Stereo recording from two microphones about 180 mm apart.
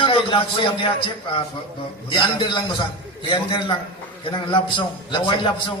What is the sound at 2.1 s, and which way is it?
A man's voice, 25° left (ahead or behind).